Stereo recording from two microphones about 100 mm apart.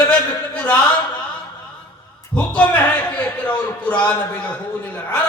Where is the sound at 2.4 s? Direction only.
15° left (ahead or behind).